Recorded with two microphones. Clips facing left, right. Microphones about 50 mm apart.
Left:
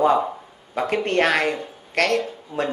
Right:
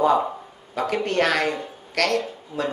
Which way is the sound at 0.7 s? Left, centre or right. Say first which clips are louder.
Left 2 dB; left.